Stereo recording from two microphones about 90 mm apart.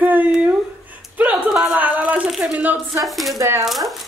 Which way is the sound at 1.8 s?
15° right (ahead or behind).